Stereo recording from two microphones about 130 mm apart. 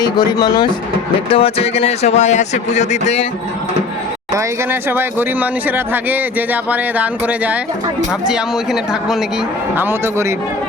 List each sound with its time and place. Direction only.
0.0 s speech: 30° left (ahead or behind)
1.3 s a man's voice: 45° left (ahead or behind)
4.4 s a woman's voice: 15° right (ahead or behind)
9.7 s a man's voice: 20° right (ahead or behind)